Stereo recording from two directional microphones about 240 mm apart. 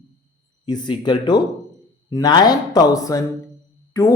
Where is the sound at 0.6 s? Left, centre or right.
Centre.